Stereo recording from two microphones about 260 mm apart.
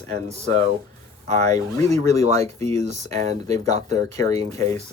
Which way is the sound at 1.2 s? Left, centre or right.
Right.